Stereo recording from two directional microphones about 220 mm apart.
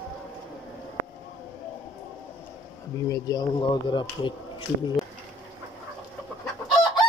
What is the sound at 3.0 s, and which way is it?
Speech, 15° left (ahead or behind).